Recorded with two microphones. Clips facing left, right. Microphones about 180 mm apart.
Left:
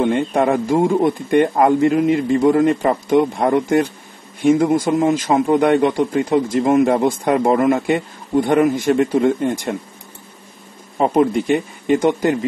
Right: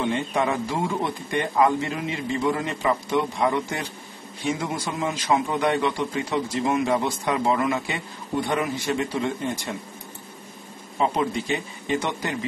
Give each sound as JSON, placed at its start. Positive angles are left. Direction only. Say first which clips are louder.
{"t": 0.0, "sound": "a man's voice", "louder": "left 8 dB", "side_deg": 55}
{"t": 11.0, "sound": "a man's voice", "louder": "left 9 dB", "side_deg": 50}